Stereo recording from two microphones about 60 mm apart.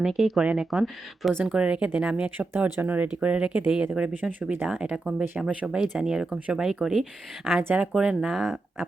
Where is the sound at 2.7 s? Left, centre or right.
Right.